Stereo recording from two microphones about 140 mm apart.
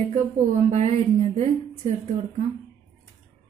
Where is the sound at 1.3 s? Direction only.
50° right (ahead or behind).